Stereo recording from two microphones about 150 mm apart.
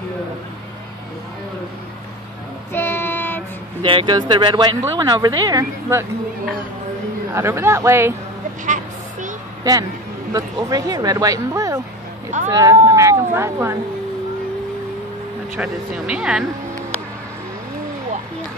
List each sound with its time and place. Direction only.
2.7 s child singing: 15° left (ahead or behind)
3.8 s speech: 35° right (ahead or behind)
7.3 s speech: 15° right (ahead or behind)
8.6 s a sound: 55° right (ahead or behind)
9.6 s speech: 25° right (ahead or behind)
15.5 s speech: 10° right (ahead or behind)